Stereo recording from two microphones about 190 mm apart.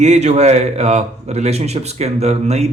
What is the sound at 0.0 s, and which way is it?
A man's voice, 35° right (ahead or behind).